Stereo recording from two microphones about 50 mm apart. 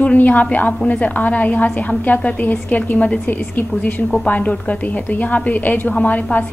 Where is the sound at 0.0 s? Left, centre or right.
Left.